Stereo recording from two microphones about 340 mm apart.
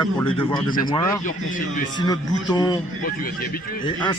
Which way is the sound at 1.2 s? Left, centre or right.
Left.